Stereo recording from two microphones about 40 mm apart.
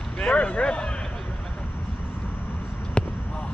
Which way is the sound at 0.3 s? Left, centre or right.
Left.